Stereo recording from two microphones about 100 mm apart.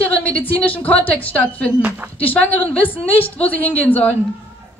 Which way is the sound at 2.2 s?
15° left (ahead or behind).